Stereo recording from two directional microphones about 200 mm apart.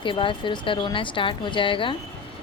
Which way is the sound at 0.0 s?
25° left (ahead or behind).